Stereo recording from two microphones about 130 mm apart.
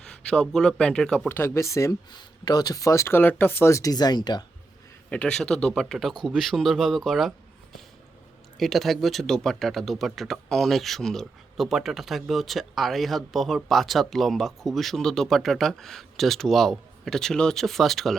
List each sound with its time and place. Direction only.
0.0 s speech: 5° left (ahead or behind)
1.3 s speech: 20° left (ahead or behind)
5.0 s speech: 5° left (ahead or behind)
8.5 s speech: centre (ahead or behind)